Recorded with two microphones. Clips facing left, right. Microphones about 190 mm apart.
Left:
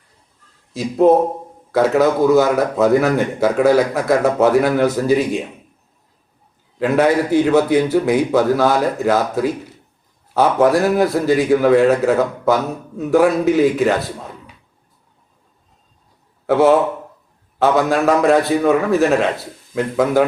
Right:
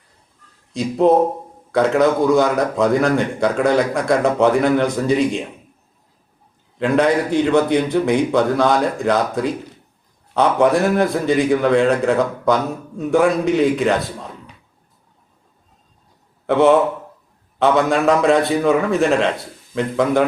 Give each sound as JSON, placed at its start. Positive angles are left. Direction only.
{"t": 0.7, "sound": "a man's voice", "side_deg": 5}
{"t": 6.7, "sound": "a man's voice", "side_deg": 5}
{"t": 16.5, "sound": "a man's voice", "side_deg": 5}